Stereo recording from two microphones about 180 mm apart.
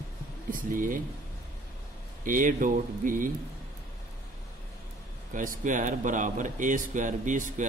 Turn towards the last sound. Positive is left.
turn(degrees=-45)  # may be behind; listen again after turning